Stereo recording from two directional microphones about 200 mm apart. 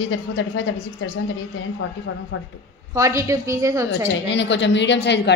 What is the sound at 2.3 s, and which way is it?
Speech, 75° left (ahead or behind).